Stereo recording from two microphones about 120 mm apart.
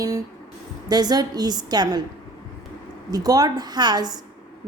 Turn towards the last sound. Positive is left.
turn(degrees=-35)  # may be behind; listen again after turning